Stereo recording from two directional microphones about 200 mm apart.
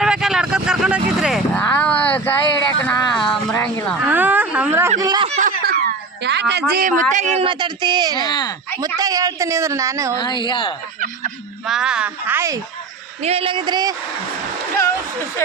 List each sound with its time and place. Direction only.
0.0 s a sound: 5° right (ahead or behind)
3.5 s speech: 10° left (ahead or behind)
4.0 s speech: 10° right (ahead or behind)
4.9 s speech: 20° right (ahead or behind)
5.4 s a sound: 40° right (ahead or behind)
6.2 s a man's voice: 60° right (ahead or behind)
6.8 s speech: 40° right (ahead or behind); by 8.3 s 20° right (ahead or behind)
8.3 s speech: 20° left (ahead or behind)
9.0 s a woman's voice: 20° right (ahead or behind)
10.2 s speech: 25° left (ahead or behind)
11.6 s speech: 5° right (ahead or behind)
13.2 s speech: 30° right (ahead or behind)